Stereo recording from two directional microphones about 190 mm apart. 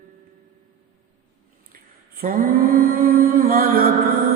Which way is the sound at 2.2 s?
50° right (ahead or behind).